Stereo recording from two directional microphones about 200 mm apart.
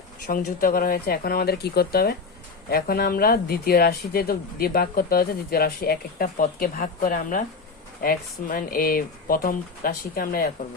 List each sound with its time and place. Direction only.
0.3 s speech: 45° left (ahead or behind)